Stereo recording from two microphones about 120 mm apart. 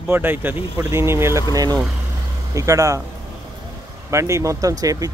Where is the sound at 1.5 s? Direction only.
30° right (ahead or behind).